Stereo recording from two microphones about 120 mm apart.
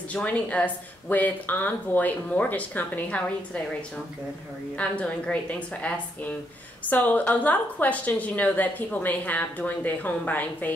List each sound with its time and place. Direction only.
0.1 s a woman's voice: 10° left (ahead or behind)
4.7 s a woman's voice: 10° left (ahead or behind)